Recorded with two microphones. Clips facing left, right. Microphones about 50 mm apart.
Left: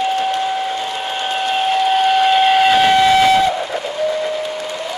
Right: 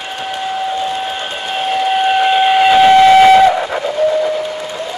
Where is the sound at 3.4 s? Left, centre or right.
Right.